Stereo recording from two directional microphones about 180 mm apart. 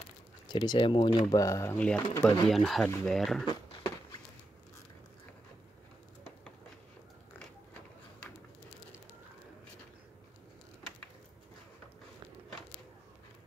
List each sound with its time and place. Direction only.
0.5 s speech: 25° left (ahead or behind); by 3.4 s centre (ahead or behind)